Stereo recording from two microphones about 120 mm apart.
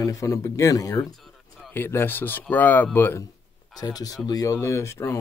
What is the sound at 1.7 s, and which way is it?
Speech, 20° left (ahead or behind).